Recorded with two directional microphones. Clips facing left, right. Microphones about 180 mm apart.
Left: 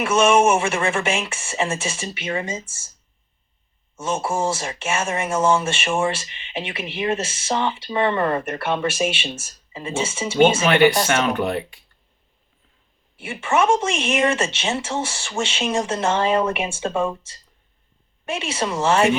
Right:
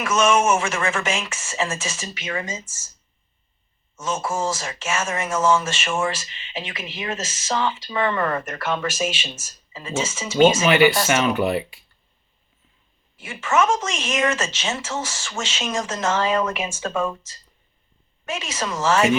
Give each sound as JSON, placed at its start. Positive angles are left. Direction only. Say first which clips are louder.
{"t": 0.0, "sound": "speech", "louder": "left 3 dB", "side_deg": 30}
{"t": 4.2, "sound": "speech", "louder": "left 2 dB", "side_deg": 30}
{"t": 10.7, "sound": "speech", "louder": "left 1 dB", "side_deg": -5}
{"t": 13.2, "sound": "speech", "louder": "left 1 dB", "side_deg": 30}
{"t": 18.3, "sound": "speech", "louder": "left 3 dB", "side_deg": 30}